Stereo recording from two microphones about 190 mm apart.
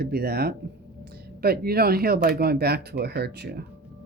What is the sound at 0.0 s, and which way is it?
Speech, 55° right (ahead or behind).